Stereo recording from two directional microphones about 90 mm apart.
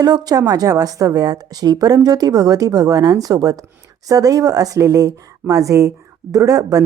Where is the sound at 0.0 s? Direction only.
50° right (ahead or behind).